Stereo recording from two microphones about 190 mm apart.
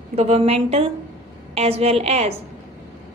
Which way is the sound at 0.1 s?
35° right (ahead or behind).